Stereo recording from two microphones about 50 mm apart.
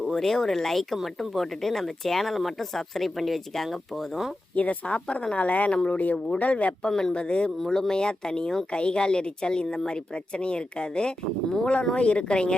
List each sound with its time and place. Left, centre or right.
0.0 s speech: centre
0.9 s speech: centre
4.5 s speech: left
6.9 s speech: centre